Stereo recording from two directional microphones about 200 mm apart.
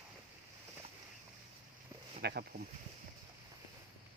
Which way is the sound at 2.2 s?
55° right (ahead or behind).